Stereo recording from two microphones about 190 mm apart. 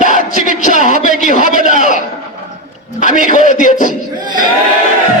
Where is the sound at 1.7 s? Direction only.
50° right (ahead or behind).